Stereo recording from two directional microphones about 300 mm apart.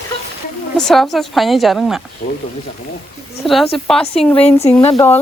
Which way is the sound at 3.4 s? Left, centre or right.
Centre.